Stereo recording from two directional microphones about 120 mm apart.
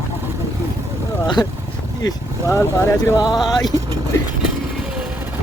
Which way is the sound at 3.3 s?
Centre (ahead or behind).